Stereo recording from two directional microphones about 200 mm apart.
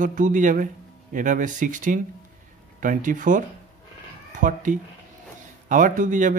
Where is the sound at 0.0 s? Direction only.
40° right (ahead or behind).